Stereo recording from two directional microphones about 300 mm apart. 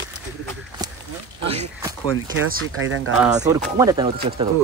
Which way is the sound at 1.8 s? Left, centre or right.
Centre.